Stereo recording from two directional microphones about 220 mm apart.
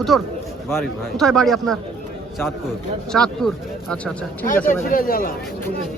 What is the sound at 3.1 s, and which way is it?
Speech, 5° left (ahead or behind).